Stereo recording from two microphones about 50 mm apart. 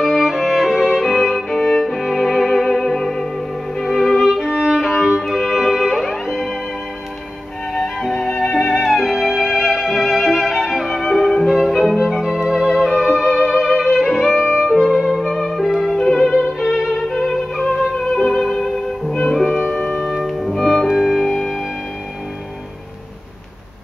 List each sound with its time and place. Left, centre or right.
0.0 s violin: centre
5.2 s music: centre
8.5 s music: centre
16.0 s violin: centre
17.1 s music: centre
18.4 s music: centre
19.6 s music: left
19.9 s music: centre